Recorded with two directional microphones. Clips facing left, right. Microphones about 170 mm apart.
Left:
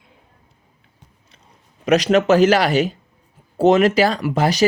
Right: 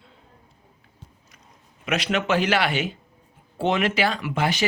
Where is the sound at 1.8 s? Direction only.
40° left (ahead or behind).